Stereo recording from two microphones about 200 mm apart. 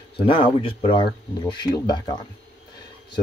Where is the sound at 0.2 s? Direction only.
25° left (ahead or behind).